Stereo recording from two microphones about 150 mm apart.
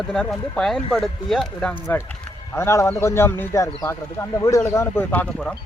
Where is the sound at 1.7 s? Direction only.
15° left (ahead or behind).